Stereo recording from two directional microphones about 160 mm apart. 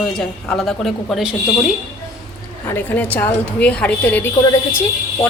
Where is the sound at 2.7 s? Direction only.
10° left (ahead or behind).